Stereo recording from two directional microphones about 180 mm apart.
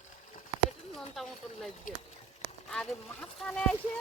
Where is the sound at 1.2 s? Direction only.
Centre (ahead or behind).